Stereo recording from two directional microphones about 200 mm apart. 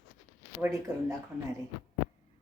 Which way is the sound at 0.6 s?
15° right (ahead or behind).